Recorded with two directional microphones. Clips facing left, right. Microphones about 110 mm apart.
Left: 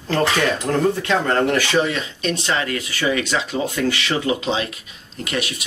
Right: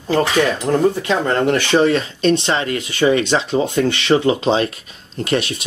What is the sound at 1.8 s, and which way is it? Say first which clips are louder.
Speech: right 6 dB; 40° right (ahead or behind).